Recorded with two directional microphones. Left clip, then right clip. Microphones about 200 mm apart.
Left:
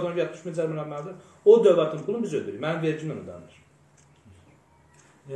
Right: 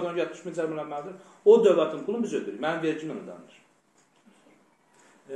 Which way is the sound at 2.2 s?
5° left (ahead or behind).